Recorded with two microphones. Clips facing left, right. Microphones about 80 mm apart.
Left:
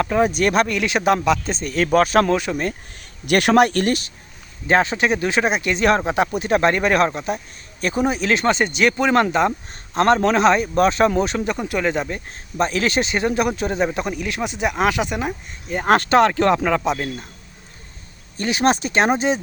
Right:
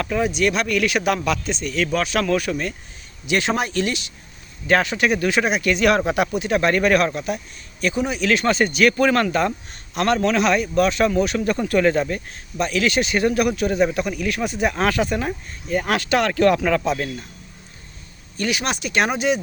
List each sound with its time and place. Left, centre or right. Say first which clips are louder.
0.0 s speech: left 3 dB; left
0.7 s speech: left 1 dB; left
1.5 s speech: left 2 dB; left
2.3 s speech: left 1 dB; left
3.2 s speech: left 7 dB; left
4.6 s speech: left 1 dB; left
11.4 s speech: right 3 dB; centre
12.5 s speech: left 1 dB; left; by 15.8 s centre
15.8 s speech: left 7 dB; left
18.3 s speech: left 5 dB; left